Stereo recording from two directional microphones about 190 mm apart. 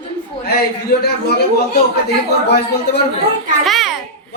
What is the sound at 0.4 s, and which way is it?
Speech, 55° left (ahead or behind).